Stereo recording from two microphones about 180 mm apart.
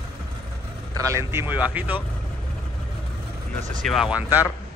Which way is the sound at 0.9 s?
15° right (ahead or behind).